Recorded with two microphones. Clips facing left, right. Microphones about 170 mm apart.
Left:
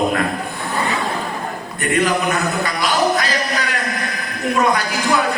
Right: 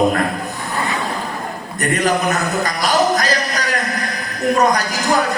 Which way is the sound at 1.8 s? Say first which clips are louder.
Right 1 dB; 40° right (ahead or behind).